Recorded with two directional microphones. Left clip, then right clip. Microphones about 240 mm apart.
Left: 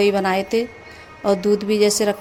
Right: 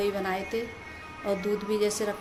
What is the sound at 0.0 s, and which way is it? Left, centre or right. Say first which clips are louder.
A woman's voice: left 11 dB; left.